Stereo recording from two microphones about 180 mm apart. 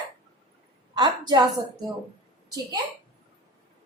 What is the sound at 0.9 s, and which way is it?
Speech, 25° right (ahead or behind).